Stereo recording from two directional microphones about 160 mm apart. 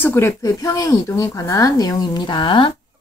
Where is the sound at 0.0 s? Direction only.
15° left (ahead or behind).